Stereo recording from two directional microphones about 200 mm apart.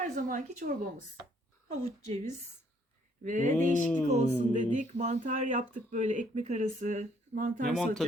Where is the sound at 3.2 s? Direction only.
40° right (ahead or behind).